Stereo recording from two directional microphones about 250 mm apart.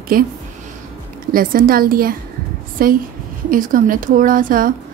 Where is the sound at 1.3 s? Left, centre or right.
Right.